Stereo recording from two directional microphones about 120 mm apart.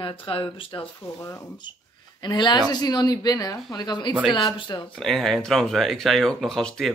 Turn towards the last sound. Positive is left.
turn(degrees=5)  # may be behind; listen again after turning